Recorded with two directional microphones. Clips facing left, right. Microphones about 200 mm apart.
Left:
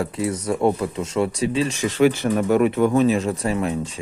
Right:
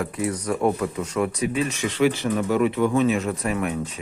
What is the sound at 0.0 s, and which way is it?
Speech, 25° left (ahead or behind).